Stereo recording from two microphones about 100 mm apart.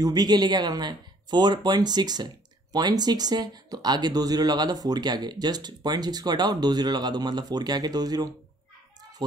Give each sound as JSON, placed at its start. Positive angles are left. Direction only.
{"t": 0.0, "sound": "speech", "side_deg": -45}